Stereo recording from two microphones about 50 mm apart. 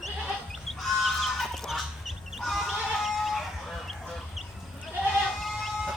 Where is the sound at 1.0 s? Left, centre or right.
Centre.